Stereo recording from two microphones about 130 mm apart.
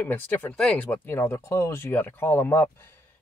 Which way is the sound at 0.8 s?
20° left (ahead or behind).